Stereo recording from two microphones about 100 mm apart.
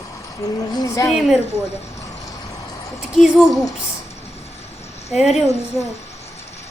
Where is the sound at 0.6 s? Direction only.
45° left (ahead or behind).